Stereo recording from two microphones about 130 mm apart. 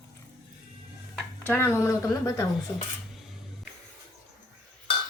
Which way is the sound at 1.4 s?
20° left (ahead or behind).